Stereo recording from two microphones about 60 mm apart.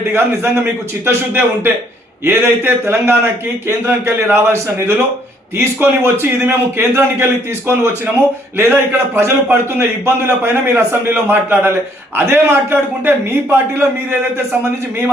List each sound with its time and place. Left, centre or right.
0.1 s a man's voice: right
8.5 s a man's voice: right